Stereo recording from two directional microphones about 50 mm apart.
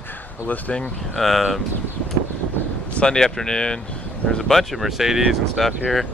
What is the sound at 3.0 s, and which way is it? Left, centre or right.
Speech, centre.